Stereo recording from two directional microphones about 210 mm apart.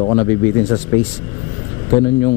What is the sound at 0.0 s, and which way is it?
Speech, 20° left (ahead or behind).